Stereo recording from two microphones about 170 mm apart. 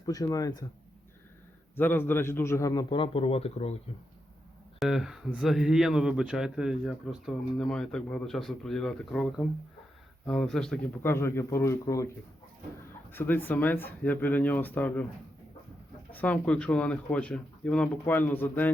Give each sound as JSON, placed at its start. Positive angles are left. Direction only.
{"t": 0.0, "sound": "a man's voice", "side_deg": 20}
{"t": 1.7, "sound": "a man's voice", "side_deg": 15}
{"t": 4.8, "sound": "speech", "side_deg": 0}
{"t": 11.0, "sound": "speech", "side_deg": 15}
{"t": 16.1, "sound": "speech", "side_deg": 10}